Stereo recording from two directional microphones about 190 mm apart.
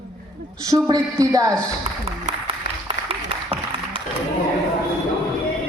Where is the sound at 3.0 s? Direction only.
30° right (ahead or behind).